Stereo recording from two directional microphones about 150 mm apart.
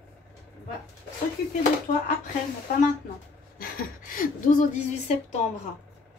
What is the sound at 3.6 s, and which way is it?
Speech, 70° left (ahead or behind).